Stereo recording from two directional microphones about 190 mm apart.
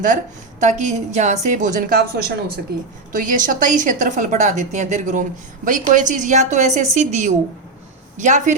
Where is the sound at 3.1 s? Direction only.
45° right (ahead or behind).